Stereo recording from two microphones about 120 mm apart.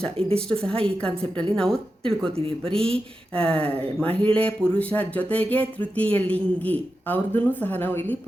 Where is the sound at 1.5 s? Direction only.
5° left (ahead or behind).